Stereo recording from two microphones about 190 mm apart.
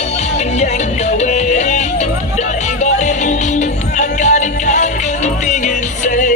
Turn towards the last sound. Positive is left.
turn(degrees=40)  # may be behind; listen again after turning